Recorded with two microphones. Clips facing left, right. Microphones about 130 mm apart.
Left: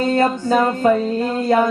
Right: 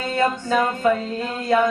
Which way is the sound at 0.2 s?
35° left (ahead or behind).